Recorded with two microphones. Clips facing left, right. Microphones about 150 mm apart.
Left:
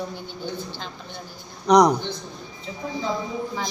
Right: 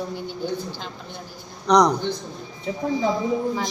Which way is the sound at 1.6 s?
5° left (ahead or behind).